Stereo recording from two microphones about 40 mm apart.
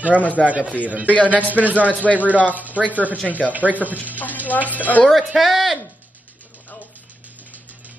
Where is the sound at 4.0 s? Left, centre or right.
Left.